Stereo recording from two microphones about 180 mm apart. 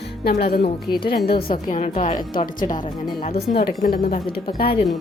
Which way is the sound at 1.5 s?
45° left (ahead or behind).